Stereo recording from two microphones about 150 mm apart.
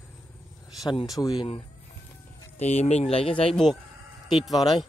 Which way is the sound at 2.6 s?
45° left (ahead or behind).